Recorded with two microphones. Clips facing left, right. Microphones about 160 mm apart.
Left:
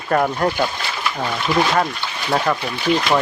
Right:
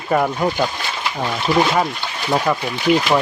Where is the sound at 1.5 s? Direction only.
35° right (ahead or behind).